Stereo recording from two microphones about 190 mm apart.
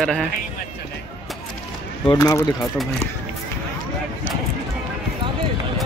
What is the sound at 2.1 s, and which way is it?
Speech, 20° left (ahead or behind).